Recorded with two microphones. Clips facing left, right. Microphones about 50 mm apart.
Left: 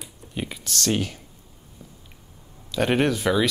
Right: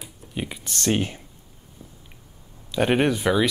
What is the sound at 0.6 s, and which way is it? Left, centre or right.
Speech, right.